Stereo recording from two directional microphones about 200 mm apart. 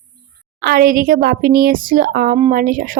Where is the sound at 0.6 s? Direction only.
50° right (ahead or behind).